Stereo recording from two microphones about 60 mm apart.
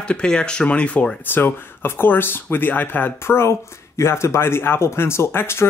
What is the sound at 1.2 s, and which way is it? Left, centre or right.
Speech, left.